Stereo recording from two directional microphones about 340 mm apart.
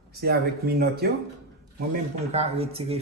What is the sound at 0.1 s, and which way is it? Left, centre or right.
A man's voice, right.